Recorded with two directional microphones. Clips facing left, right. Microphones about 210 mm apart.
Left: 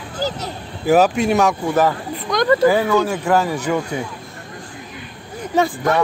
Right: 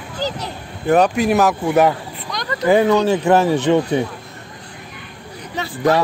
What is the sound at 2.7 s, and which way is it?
Speech, 20° right (ahead or behind).